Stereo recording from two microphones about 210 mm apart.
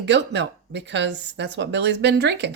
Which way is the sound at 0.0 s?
55° right (ahead or behind).